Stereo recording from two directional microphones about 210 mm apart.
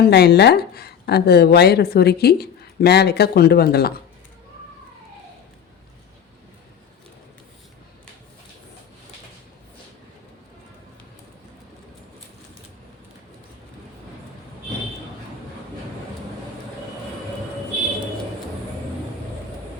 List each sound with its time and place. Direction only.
0.0 s a woman's voice: 50° left (ahead or behind)